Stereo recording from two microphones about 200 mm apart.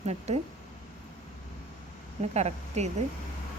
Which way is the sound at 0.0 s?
35° right (ahead or behind).